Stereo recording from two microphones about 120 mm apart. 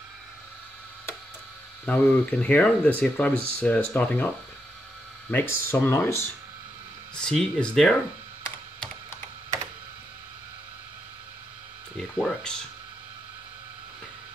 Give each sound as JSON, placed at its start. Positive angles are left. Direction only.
{"t": 1.9, "sound": "speech", "side_deg": 15}
{"t": 5.3, "sound": "speech", "side_deg": 20}
{"t": 7.2, "sound": "speech", "side_deg": 5}
{"t": 12.0, "sound": "speech", "side_deg": 5}